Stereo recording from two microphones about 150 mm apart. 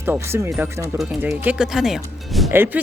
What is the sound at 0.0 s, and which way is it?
A woman's voice, 15° right (ahead or behind).